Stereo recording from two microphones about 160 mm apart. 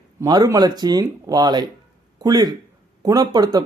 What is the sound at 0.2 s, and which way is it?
A man's voice, 20° right (ahead or behind).